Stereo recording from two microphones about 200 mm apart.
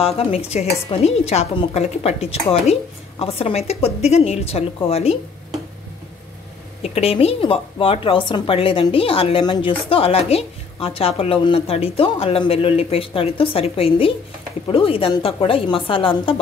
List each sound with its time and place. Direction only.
0.0 s a woman's voice: 30° left (ahead or behind)
6.8 s a woman's voice: 30° left (ahead or behind)